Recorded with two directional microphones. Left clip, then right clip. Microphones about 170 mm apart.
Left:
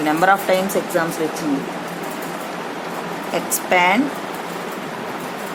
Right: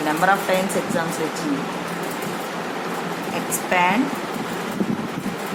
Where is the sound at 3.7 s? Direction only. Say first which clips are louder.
Left 3 dB; 50° left (ahead or behind).